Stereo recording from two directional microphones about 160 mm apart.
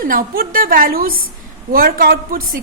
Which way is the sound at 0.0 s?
65° right (ahead or behind).